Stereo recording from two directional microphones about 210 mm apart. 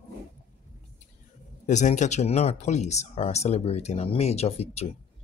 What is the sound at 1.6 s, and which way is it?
Speech, 35° left (ahead or behind).